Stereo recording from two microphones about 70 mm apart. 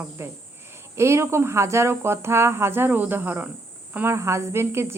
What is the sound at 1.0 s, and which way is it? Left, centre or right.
Speech, right.